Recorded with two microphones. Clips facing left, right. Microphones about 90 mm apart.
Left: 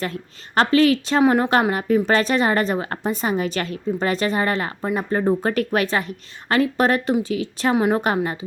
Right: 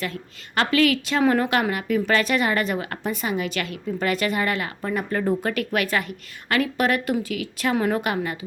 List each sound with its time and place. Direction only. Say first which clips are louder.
0.0 s a woman's voice: left 3 dB; 40° left (ahead or behind)